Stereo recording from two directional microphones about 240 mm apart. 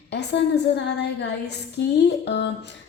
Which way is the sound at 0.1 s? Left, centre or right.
Left.